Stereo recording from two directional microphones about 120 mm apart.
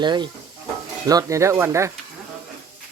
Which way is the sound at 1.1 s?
30° right (ahead or behind).